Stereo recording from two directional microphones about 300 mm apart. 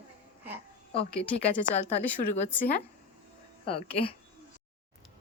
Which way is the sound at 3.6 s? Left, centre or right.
Centre.